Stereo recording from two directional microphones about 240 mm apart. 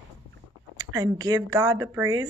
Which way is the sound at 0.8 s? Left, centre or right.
Centre.